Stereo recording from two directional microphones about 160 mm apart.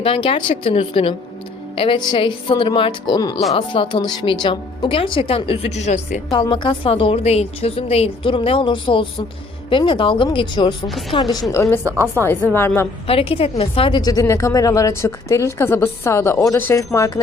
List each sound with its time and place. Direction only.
0.0 s a woman's voice: 35° left (ahead or behind); by 6.2 s 50° left (ahead or behind)
6.3 s a woman's voice: 30° left (ahead or behind)
11.8 s a woman's voice: 15° right (ahead or behind)
12.5 s a woman's voice: 15° left (ahead or behind)
13.1 s a woman's voice: 35° left (ahead or behind); by 17.1 s 20° left (ahead or behind)